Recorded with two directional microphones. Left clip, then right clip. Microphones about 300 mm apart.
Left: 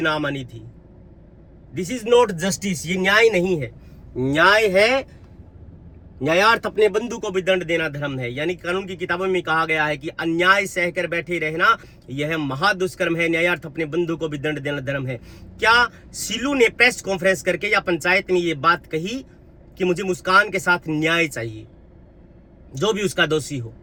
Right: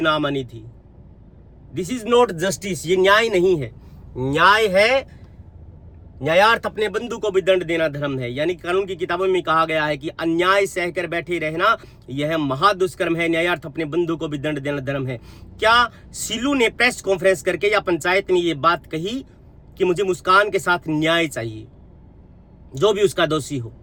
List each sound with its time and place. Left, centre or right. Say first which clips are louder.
0.0 s speech: right 3 dB; centre
1.7 s speech: left 1 dB; centre
7.1 s speech: right 3 dB; centre
22.8 s speech: right 3 dB; centre